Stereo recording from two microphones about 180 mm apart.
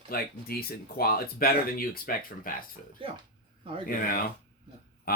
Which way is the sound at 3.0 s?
30° right (ahead or behind).